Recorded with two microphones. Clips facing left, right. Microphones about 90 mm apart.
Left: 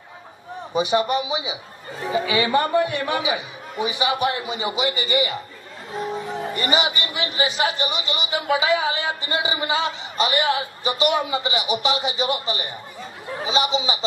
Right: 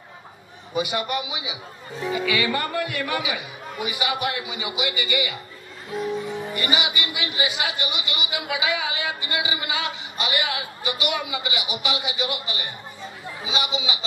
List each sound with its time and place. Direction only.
0.7 s speech: 30° left (ahead or behind)